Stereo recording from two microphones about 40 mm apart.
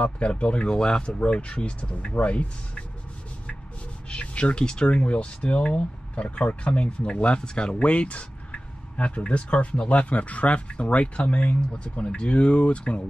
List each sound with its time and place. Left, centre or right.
0.0 s speech: left
4.1 s a sound: left
4.6 s speech: left